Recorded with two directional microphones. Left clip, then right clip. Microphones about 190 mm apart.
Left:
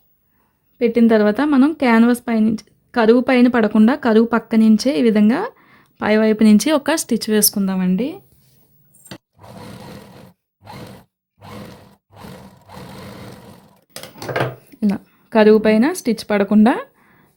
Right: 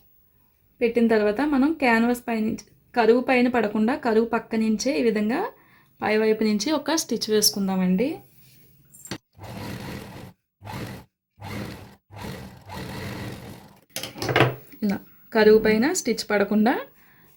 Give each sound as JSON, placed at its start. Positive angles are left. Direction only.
{"t": 0.8, "sound": "a woman's voice", "side_deg": 50}
{"t": 14.7, "sound": "speech", "side_deg": 40}